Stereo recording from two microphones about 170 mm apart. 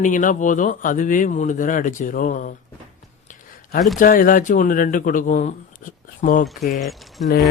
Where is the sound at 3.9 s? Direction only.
55° left (ahead or behind).